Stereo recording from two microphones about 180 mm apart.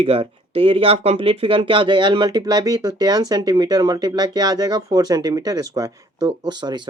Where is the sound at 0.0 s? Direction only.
30° right (ahead or behind).